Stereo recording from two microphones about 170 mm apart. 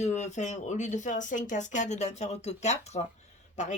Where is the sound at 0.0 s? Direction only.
40° left (ahead or behind).